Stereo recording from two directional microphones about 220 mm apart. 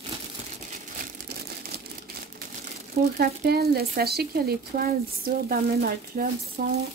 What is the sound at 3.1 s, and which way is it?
Speech, 45° right (ahead or behind).